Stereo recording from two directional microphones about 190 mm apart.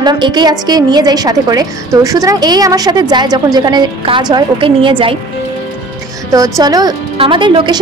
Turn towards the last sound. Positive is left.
turn(degrees=-25)  # may be behind; listen again after turning